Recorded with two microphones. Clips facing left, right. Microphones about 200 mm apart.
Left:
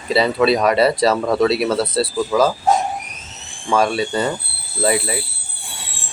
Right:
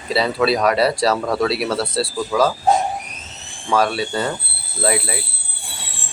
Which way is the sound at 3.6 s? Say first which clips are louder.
Left 1 dB; centre (ahead or behind).